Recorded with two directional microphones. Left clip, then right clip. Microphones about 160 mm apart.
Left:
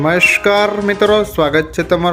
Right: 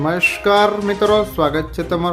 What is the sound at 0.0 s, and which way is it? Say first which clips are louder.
Speech: left 5 dB; 20° left (ahead or behind).